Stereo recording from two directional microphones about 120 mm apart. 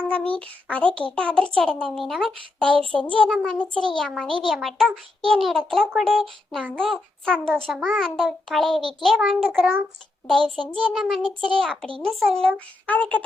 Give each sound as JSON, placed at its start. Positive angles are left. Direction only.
{"t": 0.1, "sound": "a child's voice", "side_deg": 10}
{"t": 8.8, "sound": "a child's voice", "side_deg": 40}
{"t": 9.0, "sound": "a child's voice", "side_deg": 0}